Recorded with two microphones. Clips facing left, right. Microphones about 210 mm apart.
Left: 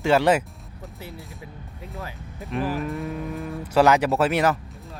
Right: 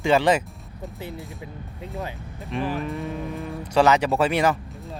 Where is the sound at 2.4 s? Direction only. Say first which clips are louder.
Left 1 dB; centre (ahead or behind).